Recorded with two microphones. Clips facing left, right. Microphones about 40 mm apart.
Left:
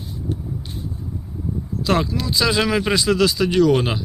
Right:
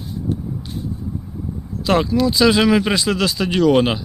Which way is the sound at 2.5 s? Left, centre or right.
Centre.